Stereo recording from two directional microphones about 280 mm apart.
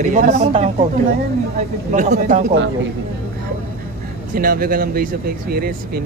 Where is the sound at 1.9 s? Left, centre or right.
Right.